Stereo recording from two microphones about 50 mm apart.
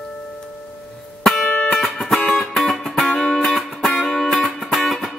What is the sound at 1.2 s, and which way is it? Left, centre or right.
Music, centre.